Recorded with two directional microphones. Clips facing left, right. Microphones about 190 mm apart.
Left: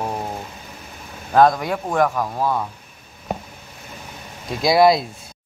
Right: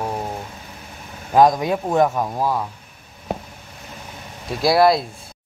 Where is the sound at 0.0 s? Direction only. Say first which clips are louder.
Even; centre (ahead or behind).